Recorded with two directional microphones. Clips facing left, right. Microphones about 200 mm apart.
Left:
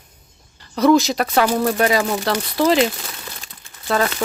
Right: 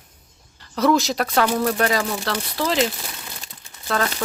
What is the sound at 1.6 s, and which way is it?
Speech, 15° left (ahead or behind).